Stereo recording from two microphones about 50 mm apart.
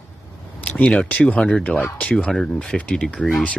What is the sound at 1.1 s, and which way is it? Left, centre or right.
Speech, centre.